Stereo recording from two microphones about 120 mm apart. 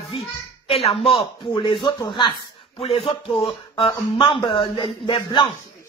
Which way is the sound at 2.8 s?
55° left (ahead or behind).